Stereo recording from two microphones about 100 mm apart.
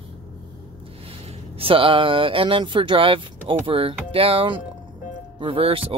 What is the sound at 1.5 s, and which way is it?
Speech, 65° right (ahead or behind).